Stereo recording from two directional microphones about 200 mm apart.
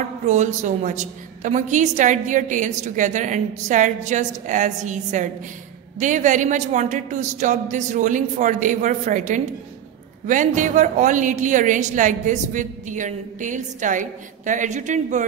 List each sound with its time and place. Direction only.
0.3 s a woman's voice: 35° right (ahead or behind)